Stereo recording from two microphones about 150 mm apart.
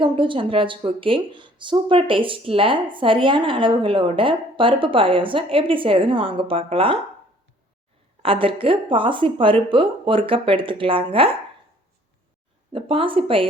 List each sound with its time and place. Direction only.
0.0 s speech: 35° right (ahead or behind)
8.2 s speech: 35° right (ahead or behind)
12.7 s speech: 35° right (ahead or behind)